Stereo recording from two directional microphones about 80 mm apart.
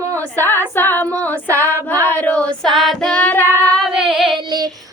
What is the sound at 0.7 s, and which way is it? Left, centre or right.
Female singing, left.